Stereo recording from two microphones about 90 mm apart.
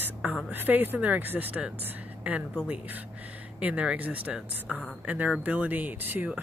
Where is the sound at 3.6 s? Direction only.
15° right (ahead or behind).